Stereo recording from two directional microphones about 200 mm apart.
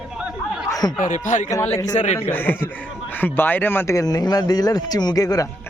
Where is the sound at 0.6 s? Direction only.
20° left (ahead or behind).